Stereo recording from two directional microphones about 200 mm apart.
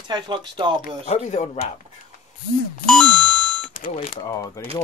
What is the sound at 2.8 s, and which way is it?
Music, 5° left (ahead or behind).